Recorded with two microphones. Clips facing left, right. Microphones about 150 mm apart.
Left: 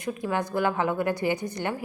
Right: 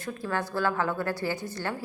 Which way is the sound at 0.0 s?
15° left (ahead or behind).